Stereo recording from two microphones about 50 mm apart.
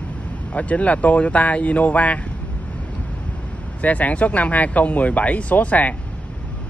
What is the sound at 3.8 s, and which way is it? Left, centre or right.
Speech, left.